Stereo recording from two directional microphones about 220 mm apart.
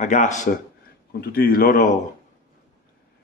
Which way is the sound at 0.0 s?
35° left (ahead or behind).